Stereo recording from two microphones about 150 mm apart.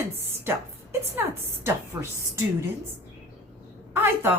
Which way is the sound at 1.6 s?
15° right (ahead or behind).